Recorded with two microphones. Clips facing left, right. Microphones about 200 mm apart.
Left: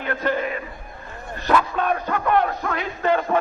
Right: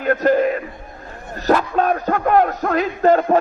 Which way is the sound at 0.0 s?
45° right (ahead or behind).